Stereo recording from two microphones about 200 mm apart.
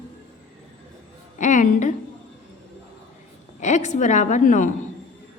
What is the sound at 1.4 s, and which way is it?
Speech, 35° left (ahead or behind).